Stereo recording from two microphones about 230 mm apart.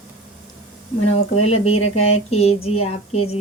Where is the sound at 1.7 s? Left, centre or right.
Left.